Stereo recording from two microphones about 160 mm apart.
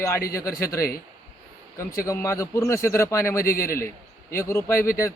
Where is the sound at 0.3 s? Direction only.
20° left (ahead or behind).